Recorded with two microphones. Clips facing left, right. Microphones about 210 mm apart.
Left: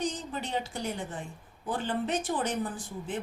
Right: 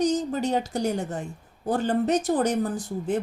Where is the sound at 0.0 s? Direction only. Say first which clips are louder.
Right 10 dB; 45° right (ahead or behind).